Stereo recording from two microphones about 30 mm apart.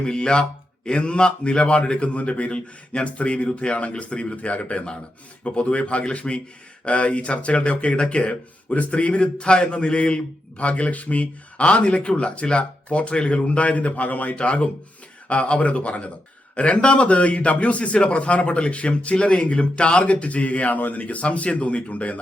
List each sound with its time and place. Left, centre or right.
0.0 s speech: left
2.5 s speech: left
4.4 s speech: left
9.4 s speech: left
10.6 s speech: left
14.3 s speech: left